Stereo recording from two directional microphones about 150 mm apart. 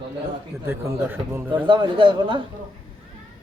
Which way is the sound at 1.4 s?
35° right (ahead or behind).